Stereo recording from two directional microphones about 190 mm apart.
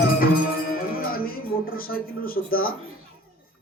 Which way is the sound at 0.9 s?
50° left (ahead or behind).